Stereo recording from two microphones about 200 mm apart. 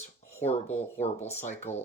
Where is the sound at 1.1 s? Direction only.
10° left (ahead or behind).